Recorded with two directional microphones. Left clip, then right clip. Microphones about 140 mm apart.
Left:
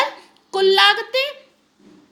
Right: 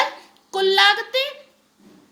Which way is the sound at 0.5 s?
15° left (ahead or behind).